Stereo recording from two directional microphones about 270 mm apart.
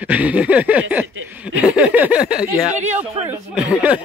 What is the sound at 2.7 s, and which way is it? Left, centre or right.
Speech, right.